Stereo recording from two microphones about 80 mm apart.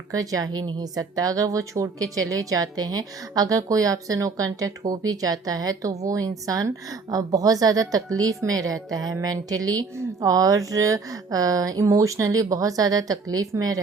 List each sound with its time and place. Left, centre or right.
0.1 s a woman's voice: right